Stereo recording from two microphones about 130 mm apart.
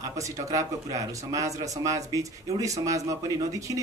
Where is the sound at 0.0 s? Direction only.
25° right (ahead or behind).